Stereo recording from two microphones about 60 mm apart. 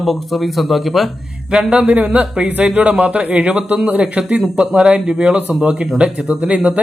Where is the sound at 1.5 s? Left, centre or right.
Centre.